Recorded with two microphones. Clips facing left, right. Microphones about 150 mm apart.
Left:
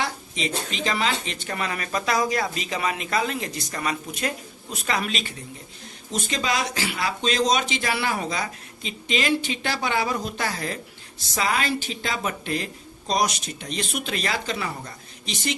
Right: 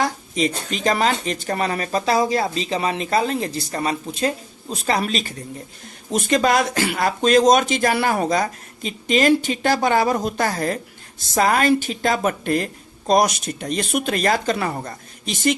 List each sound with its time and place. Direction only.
0.0 s speech: 45° right (ahead or behind)
6.1 s speech: 55° right (ahead or behind)